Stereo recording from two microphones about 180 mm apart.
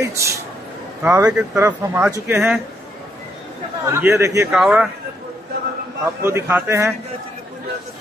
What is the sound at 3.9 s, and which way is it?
Speech, 10° right (ahead or behind).